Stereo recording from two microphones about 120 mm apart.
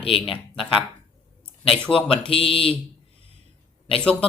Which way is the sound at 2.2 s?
50° left (ahead or behind).